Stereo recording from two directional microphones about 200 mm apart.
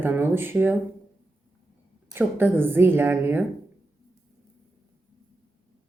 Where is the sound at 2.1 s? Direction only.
10° right (ahead or behind).